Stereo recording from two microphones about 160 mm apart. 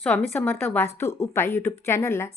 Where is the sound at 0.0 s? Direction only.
10° left (ahead or behind).